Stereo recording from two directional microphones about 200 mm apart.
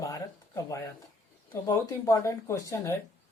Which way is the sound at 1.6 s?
15° left (ahead or behind).